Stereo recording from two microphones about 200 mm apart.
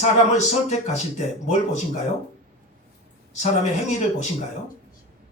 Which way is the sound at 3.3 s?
35° left (ahead or behind).